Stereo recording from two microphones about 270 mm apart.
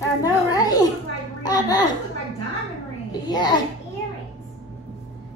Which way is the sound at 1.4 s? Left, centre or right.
Centre.